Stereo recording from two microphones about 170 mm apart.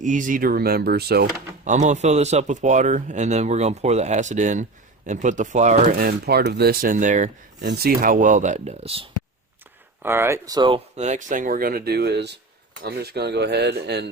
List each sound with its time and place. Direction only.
0.0 s speech: 50° right (ahead or behind); by 1.3 s 70° right (ahead or behind)
1.6 s speech: 45° right (ahead or behind)
6.0 s speech: 65° right (ahead or behind); by 7.3 s 50° right (ahead or behind)
7.6 s speech: 75° right (ahead or behind); by 9.0 s 35° right (ahead or behind)
10.0 s speech: 15° right (ahead or behind)
10.9 s speech: 45° right (ahead or behind); by 14.1 s 80° right